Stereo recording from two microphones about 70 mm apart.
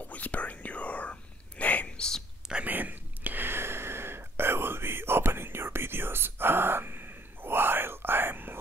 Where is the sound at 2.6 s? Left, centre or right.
Right.